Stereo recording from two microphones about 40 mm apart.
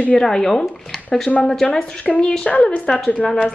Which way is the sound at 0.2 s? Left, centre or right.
Centre.